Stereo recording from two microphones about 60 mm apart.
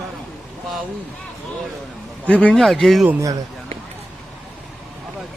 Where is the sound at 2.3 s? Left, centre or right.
Left.